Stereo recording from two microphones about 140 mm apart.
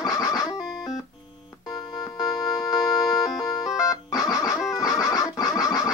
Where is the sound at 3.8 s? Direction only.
25° left (ahead or behind).